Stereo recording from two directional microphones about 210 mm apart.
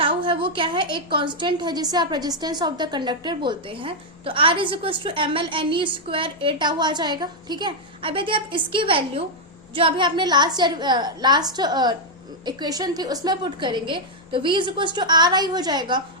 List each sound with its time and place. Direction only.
0.0 s a woman's voice: 25° right (ahead or behind)